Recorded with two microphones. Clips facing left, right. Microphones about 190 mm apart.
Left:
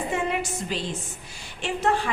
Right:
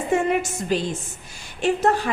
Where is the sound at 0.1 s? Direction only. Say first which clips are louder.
Right 9 dB; 45° right (ahead or behind).